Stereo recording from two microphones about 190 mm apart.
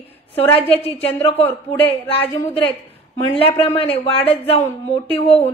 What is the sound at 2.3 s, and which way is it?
A woman's voice, 25° left (ahead or behind).